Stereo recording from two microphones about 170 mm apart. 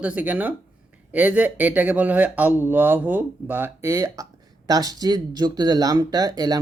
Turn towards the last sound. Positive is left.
turn(degrees=-25)  # may be behind; listen again after turning